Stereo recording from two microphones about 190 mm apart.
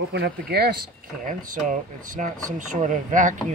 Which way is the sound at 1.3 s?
45° right (ahead or behind).